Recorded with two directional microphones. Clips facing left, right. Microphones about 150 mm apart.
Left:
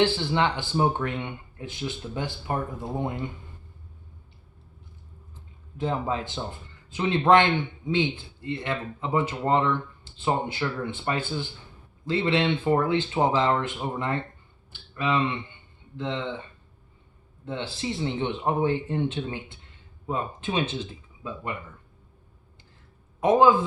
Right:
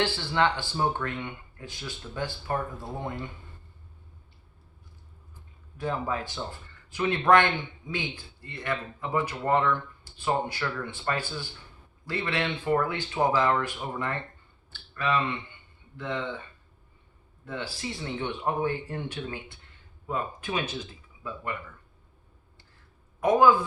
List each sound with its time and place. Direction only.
0.0 s speech: 20° left (ahead or behind)
5.7 s speech: 20° left (ahead or behind)
14.7 s a sound: 20° left (ahead or behind)
16.0 s speech: 25° left (ahead or behind)
17.4 s speech: 25° left (ahead or behind)